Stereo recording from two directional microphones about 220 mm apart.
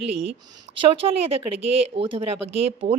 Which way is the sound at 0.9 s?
25° right (ahead or behind).